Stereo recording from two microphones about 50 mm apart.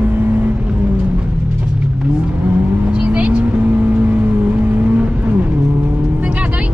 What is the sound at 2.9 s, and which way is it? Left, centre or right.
Vehicle, right.